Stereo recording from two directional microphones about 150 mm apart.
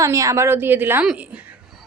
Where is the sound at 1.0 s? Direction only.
5° right (ahead or behind).